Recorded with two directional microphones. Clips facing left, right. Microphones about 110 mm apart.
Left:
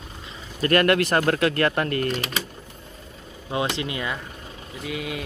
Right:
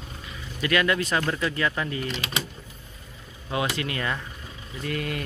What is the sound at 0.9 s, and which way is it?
Speech, 60° left (ahead or behind).